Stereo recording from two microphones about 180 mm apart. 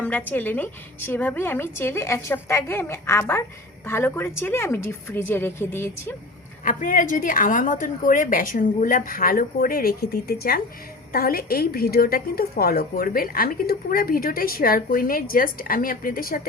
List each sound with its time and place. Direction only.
0.0 s a woman's voice: 10° left (ahead or behind)
6.7 s a woman's voice: 45° left (ahead or behind)